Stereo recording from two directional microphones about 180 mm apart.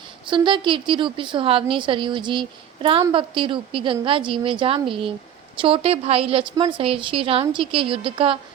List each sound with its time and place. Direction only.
0.3 s a woman's voice: 25° right (ahead or behind)